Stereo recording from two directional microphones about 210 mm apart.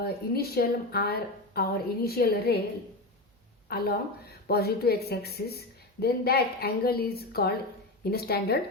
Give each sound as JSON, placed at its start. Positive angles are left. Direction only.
{"t": 0.0, "sound": "a woman's voice", "side_deg": 50}
{"t": 3.7, "sound": "a woman's voice", "side_deg": 45}